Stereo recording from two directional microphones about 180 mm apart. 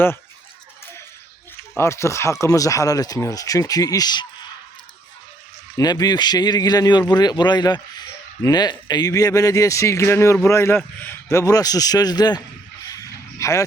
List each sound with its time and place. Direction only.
1.7 s speech: 15° left (ahead or behind)
5.7 s speech: 20° left (ahead or behind)
12.8 s a sound: 20° left (ahead or behind)